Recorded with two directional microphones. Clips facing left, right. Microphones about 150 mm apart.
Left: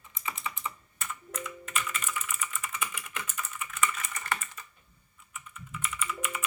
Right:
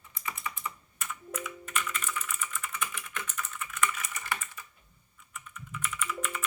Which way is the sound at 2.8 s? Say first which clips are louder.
Even; 10° left (ahead or behind).